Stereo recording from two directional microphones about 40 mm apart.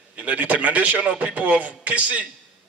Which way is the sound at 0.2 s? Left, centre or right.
Right.